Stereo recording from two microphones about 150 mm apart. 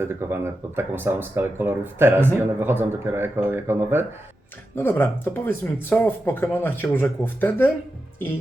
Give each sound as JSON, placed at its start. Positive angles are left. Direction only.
{"t": 0.0, "sound": "speech", "side_deg": -15}
{"t": 4.7, "sound": "speech", "side_deg": 15}